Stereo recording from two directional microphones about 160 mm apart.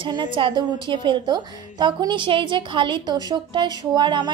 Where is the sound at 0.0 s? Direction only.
30° right (ahead or behind).